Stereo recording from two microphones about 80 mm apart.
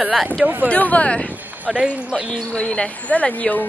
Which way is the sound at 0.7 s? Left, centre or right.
Centre.